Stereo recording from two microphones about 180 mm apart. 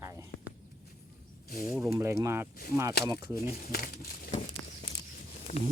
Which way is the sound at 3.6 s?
55° left (ahead or behind).